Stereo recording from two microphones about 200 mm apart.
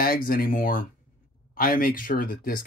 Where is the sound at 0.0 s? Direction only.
45° left (ahead or behind).